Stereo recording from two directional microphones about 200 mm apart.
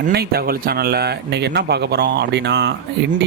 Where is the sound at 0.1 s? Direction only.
50° right (ahead or behind).